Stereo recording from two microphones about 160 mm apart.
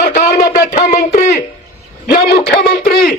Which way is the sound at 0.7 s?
45° left (ahead or behind).